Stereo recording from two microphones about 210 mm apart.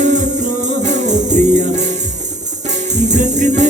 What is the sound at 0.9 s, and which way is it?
Music, 35° right (ahead or behind).